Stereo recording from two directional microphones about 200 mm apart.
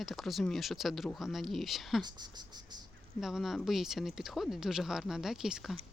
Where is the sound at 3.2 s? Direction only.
Centre (ahead or behind).